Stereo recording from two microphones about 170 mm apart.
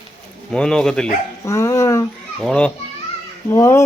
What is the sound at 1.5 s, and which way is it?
Speech, 15° left (ahead or behind).